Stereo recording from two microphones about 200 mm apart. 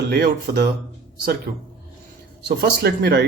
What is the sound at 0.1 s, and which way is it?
Speech, 55° right (ahead or behind).